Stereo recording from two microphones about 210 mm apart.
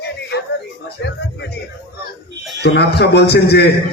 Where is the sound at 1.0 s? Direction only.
55° left (ahead or behind).